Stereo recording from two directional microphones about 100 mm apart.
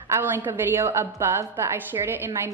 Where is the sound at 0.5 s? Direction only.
25° right (ahead or behind).